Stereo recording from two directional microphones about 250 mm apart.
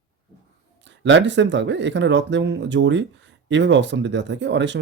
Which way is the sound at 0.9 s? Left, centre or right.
Right.